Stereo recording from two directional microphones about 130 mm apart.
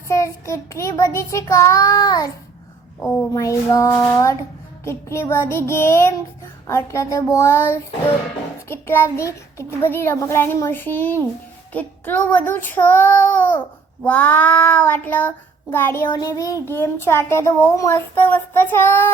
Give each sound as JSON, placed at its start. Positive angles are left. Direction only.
{"t": 0.1, "sound": "child singing", "side_deg": 25}
{"t": 3.3, "sound": "child singing", "side_deg": 25}